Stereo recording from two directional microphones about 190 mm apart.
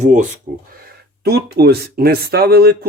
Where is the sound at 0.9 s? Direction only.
55° right (ahead or behind).